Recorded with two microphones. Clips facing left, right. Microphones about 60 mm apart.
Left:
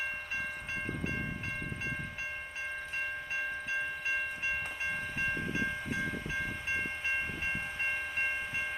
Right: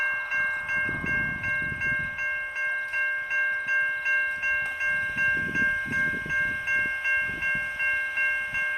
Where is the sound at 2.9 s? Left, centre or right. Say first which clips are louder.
Right 8 dB; right.